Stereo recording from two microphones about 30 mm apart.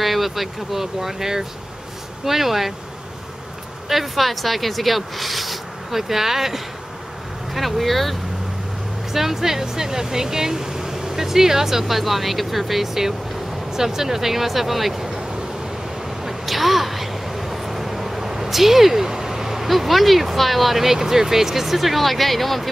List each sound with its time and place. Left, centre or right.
0.0 s speech: centre
3.9 s speech: centre
9.1 s speech: centre
16.3 s speech: centre